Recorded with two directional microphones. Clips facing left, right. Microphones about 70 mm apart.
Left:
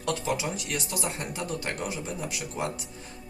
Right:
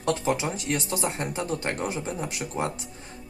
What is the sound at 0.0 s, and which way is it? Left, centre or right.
Speech, right.